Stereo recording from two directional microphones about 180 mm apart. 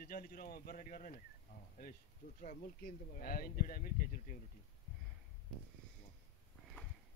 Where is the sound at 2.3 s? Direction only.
50° left (ahead or behind).